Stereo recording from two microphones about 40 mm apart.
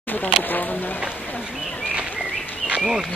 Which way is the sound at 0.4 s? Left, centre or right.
Left.